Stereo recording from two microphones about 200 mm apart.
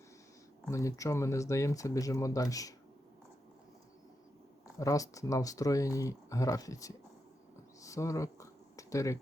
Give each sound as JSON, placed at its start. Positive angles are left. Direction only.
{"t": 0.7, "sound": "speech", "side_deg": 15}
{"t": 4.8, "sound": "speech", "side_deg": 15}
{"t": 7.8, "sound": "a sound", "side_deg": 15}